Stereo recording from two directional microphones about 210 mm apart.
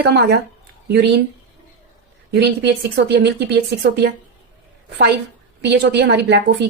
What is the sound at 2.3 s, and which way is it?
Speech, 50° right (ahead or behind).